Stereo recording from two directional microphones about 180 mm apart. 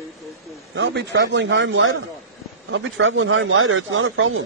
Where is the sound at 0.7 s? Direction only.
75° right (ahead or behind).